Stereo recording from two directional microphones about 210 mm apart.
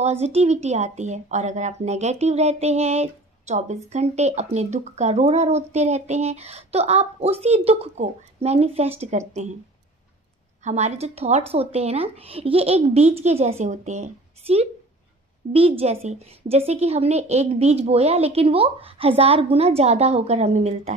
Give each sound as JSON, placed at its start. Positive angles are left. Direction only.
{"t": 0.0, "sound": "a woman's voice", "side_deg": -30}
{"t": 10.6, "sound": "a woman's voice", "side_deg": -35}